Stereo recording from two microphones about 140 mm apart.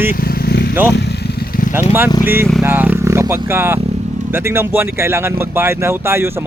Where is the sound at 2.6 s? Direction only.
15° right (ahead or behind).